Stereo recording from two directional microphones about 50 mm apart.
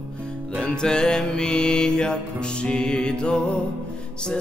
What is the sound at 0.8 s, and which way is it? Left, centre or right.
Music, centre.